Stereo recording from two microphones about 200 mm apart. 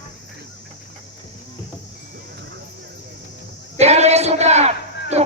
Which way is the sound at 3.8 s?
35° right (ahead or behind).